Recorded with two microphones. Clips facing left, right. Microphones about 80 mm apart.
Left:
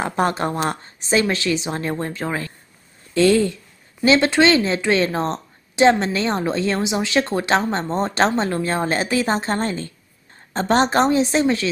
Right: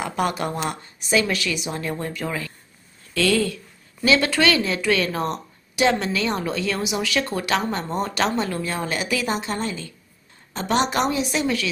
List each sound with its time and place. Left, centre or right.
0.0 s a woman's voice: left